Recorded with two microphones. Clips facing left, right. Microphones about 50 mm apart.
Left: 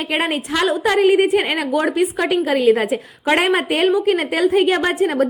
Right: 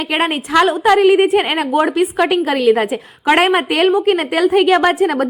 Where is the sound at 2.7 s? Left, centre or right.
Right.